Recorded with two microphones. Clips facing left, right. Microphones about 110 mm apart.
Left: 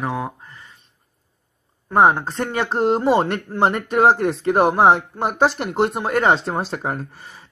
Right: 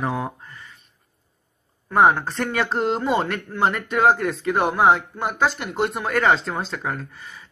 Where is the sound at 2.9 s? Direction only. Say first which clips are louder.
Left 5 dB; 35° left (ahead or behind).